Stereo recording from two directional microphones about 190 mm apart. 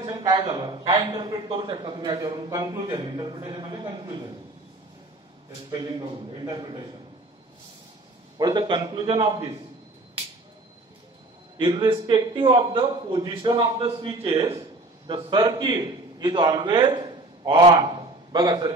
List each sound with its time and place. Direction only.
0.0 s a man's voice: 20° right (ahead or behind)
5.7 s a man's voice: 20° right (ahead or behind)
8.4 s a man's voice: 20° right (ahead or behind)
11.5 s a man's voice: 25° right (ahead or behind)